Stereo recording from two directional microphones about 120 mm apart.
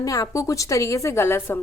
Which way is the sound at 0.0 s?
30° left (ahead or behind).